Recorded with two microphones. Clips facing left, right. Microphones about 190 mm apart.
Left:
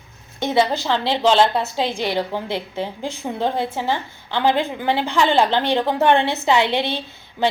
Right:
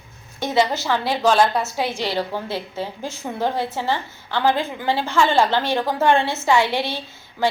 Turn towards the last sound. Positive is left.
turn(degrees=20)  # may be behind; listen again after turning